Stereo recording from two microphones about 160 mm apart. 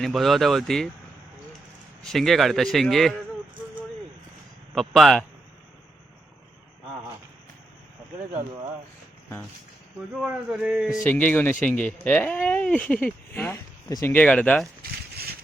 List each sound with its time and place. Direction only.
0.0 s speech: centre (ahead or behind)
2.0 s speech: centre (ahead or behind)
4.7 s speech: centre (ahead or behind)
10.2 s speech: 5° right (ahead or behind)
11.0 s speech: 10° left (ahead or behind)
14.8 s a sound: 75° right (ahead or behind)